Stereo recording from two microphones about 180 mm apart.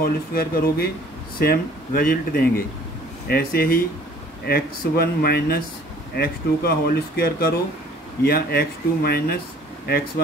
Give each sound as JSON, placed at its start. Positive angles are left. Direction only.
{"t": 0.0, "sound": "speech", "side_deg": 55}